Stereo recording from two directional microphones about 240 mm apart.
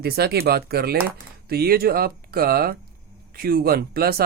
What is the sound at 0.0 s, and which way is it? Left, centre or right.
Speech, right.